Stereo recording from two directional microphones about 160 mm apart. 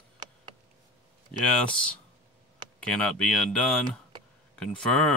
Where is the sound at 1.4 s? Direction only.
5° left (ahead or behind).